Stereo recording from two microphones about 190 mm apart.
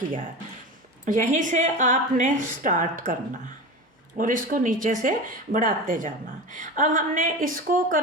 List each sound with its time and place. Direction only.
1.0 s speech: 40° right (ahead or behind)
4.2 s speech: 45° right (ahead or behind)